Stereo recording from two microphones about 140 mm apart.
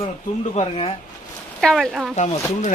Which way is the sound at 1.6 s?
Centre (ahead or behind).